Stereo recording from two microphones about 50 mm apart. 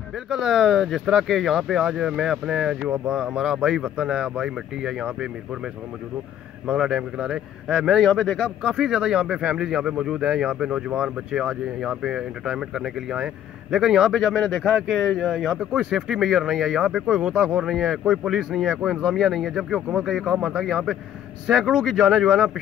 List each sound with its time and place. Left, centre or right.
0.3 s speech: centre
6.8 s speech: centre
8.0 s speech: centre
8.6 s speech: centre
15.7 s speech: centre
17.6 s speech: centre